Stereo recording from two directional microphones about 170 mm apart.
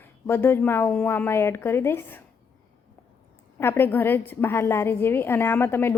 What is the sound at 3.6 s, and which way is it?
A woman's voice, 15° left (ahead or behind).